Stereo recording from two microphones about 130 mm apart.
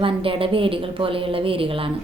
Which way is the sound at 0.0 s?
45° right (ahead or behind).